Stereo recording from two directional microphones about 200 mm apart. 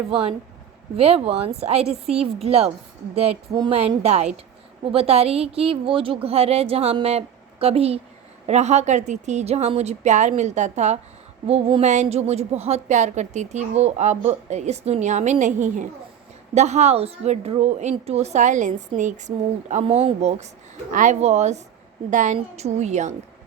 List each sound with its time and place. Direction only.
0.1 s a woman's voice: 30° right (ahead or behind)